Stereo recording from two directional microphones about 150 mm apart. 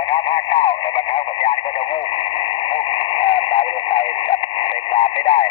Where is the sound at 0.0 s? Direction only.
35° left (ahead or behind).